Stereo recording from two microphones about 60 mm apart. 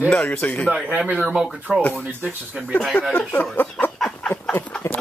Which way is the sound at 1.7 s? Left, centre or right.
Centre.